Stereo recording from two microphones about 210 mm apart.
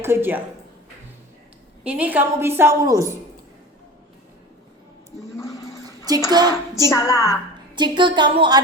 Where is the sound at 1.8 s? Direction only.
5° right (ahead or behind).